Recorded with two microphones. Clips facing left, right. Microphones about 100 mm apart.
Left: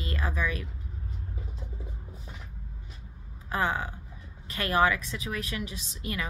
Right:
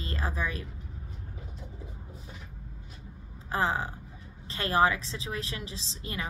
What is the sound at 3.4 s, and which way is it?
A woman's voice, 30° right (ahead or behind).